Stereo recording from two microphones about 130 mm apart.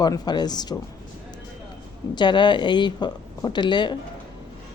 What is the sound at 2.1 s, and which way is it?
Speech, 35° left (ahead or behind).